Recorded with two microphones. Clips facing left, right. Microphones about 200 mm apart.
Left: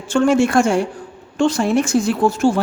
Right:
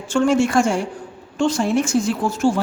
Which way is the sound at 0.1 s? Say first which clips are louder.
Left 2 dB; 60° left (ahead or behind).